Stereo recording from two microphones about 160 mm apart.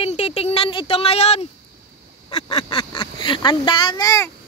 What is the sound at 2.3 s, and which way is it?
Speech, 25° left (ahead or behind).